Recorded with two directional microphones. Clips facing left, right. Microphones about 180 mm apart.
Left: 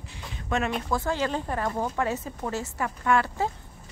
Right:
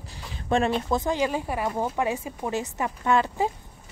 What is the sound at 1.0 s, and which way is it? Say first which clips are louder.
Speech: right 2 dB; 15° right (ahead or behind).